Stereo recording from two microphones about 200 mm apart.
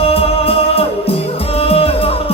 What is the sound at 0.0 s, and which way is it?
Music, 30° left (ahead or behind).